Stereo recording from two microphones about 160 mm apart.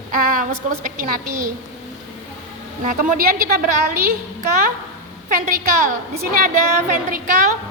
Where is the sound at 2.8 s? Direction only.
60° right (ahead or behind).